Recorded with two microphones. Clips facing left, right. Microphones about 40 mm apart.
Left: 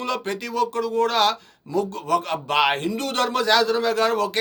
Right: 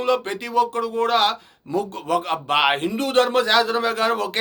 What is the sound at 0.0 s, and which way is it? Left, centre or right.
Speech, centre.